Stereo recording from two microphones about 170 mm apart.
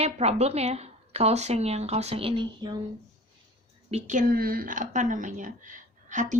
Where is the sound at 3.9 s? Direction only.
50° right (ahead or behind).